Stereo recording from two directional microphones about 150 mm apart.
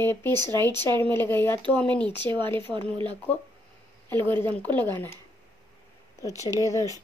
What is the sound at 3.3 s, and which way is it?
Speech, 10° left (ahead or behind).